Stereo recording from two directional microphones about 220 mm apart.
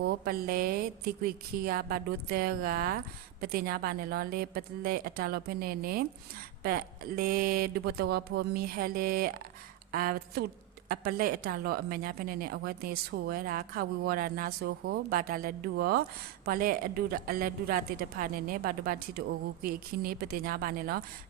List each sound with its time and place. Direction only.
0.0 s a woman's voice: 45° right (ahead or behind)